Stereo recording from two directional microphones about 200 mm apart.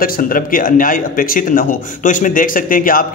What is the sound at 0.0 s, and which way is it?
Speech, 45° left (ahead or behind).